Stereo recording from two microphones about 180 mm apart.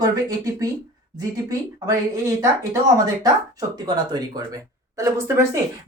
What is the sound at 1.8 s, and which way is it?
A woman's voice, 15° right (ahead or behind).